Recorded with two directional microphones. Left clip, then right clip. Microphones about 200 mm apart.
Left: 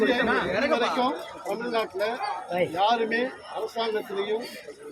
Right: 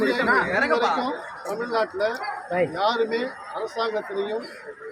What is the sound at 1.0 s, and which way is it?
Speech, centre (ahead or behind).